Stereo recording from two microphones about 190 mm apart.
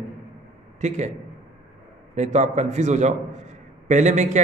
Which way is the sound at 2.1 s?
40° right (ahead or behind).